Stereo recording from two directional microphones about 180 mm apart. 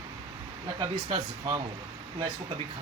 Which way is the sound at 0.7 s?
30° right (ahead or behind).